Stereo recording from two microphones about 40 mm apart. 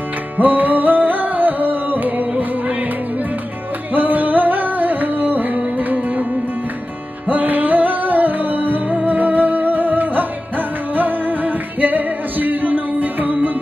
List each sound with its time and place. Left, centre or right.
0.4 s music: right
3.9 s music: right
7.2 s music: right